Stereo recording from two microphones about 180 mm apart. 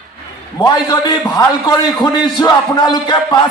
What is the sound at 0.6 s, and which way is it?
A man's voice, 20° left (ahead or behind).